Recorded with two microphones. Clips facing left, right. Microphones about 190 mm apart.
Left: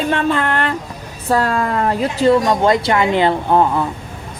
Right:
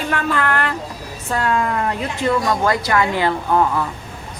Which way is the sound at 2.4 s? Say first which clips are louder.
Left 4 dB; 20° left (ahead or behind).